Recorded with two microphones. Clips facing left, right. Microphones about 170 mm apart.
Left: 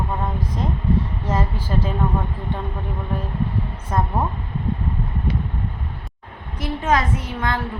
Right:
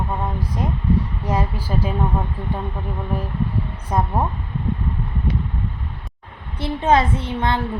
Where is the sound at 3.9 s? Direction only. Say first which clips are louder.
Right 1 dB; 15° right (ahead or behind).